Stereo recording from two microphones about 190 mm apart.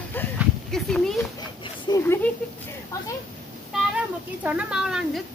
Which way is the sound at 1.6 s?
20° left (ahead or behind).